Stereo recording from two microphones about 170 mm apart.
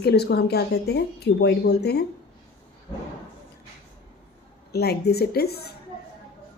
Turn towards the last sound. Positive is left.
turn(degrees=70)  # may be behind; listen again after turning